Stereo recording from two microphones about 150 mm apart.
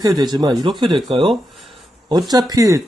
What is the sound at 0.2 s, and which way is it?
Speech, 30° right (ahead or behind).